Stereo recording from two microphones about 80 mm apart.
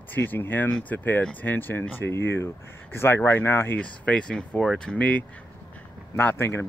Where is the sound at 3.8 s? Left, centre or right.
Centre.